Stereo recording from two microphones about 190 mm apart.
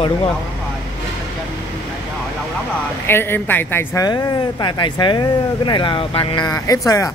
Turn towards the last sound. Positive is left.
turn(degrees=15)  # may be behind; listen again after turning